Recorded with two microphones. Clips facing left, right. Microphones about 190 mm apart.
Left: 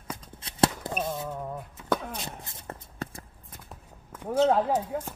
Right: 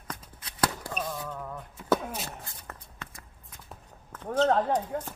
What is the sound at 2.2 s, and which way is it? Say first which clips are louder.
Walk: left 2 dB; 25° left (ahead or behind).